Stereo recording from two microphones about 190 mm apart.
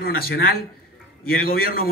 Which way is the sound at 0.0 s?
50° left (ahead or behind).